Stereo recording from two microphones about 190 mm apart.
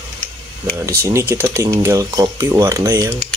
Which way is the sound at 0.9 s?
15° right (ahead or behind).